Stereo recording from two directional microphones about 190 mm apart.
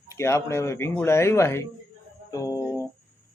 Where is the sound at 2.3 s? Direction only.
15° left (ahead or behind).